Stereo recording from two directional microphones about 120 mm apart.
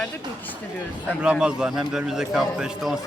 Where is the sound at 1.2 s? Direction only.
5° right (ahead or behind).